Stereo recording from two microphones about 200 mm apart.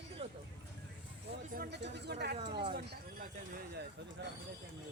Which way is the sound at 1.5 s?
50° right (ahead or behind).